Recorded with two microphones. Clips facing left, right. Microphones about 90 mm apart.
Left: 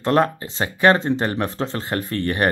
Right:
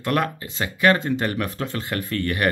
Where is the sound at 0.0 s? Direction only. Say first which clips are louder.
Left 5 dB; 30° left (ahead or behind).